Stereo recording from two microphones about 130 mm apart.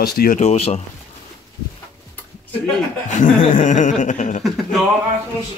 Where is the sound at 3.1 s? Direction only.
75° left (ahead or behind).